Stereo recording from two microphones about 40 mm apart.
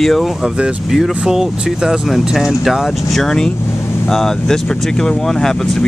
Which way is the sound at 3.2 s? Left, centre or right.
Centre.